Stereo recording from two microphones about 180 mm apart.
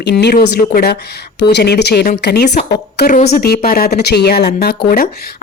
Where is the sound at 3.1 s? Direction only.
45° left (ahead or behind); by 4.8 s 65° left (ahead or behind).